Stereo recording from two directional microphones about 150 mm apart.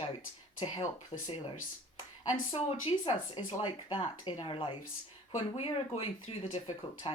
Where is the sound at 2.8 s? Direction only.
35° left (ahead or behind).